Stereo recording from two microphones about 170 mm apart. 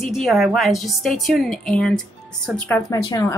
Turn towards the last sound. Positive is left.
turn(degrees=20)  # may be behind; listen again after turning